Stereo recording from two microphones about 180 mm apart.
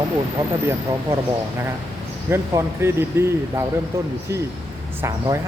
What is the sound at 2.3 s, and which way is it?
Speech, 15° right (ahead or behind).